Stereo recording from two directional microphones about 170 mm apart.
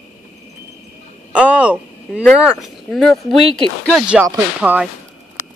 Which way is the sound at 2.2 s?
Centre (ahead or behind).